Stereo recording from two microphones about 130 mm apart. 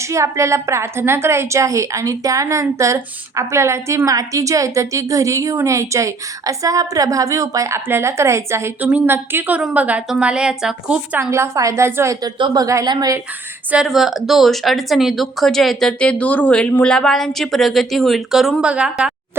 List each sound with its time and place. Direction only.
0.1 s a woman's voice: 25° right (ahead or behind); by 11.2 s 5° right (ahead or behind)
11.2 s a woman's voice: 20° right (ahead or behind)
12.2 s speech: 30° right (ahead or behind)
13.7 s speech: 5° right (ahead or behind)